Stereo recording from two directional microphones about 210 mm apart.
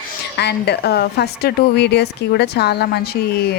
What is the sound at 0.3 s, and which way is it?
A woman's voice, 50° left (ahead or behind).